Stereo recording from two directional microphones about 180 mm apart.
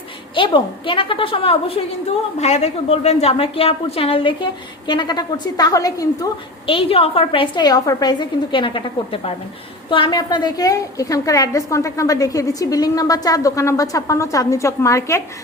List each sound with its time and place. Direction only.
0.3 s a woman's voice: 25° left (ahead or behind)
6.7 s a woman's voice: 30° left (ahead or behind)